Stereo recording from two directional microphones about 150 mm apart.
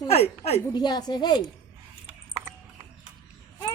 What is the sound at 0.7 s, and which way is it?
Speech, 25° left (ahead or behind).